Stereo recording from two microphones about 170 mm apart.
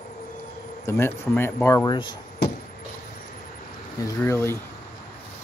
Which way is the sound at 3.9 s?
20° left (ahead or behind).